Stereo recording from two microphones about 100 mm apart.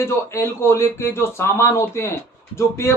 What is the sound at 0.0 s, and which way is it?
A man's voice, 25° left (ahead or behind).